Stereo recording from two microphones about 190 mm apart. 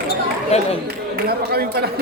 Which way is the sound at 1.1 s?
55° right (ahead or behind).